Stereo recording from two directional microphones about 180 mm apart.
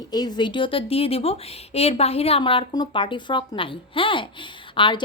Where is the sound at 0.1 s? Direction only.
20° left (ahead or behind).